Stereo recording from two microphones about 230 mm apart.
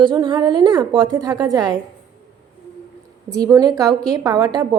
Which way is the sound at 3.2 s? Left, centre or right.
Centre.